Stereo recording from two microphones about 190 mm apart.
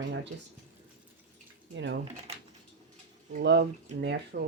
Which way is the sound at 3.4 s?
60° right (ahead or behind).